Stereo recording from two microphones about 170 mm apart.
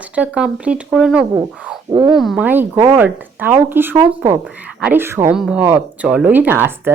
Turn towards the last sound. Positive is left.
turn(degrees=-10)  # may be behind; listen again after turning